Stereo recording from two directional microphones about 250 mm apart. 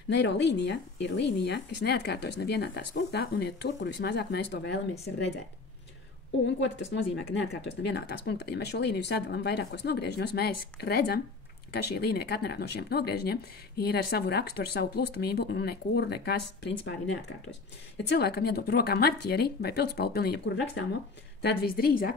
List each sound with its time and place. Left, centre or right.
0.1 s a woman's voice: left
6.4 s speech: left
17.9 s speech: left